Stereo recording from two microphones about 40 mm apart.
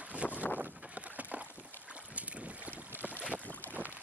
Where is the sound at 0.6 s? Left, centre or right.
Right.